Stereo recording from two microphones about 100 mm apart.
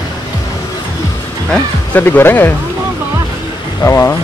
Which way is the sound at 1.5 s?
15° left (ahead or behind).